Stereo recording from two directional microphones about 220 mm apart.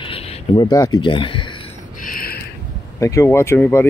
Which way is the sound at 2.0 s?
45° left (ahead or behind).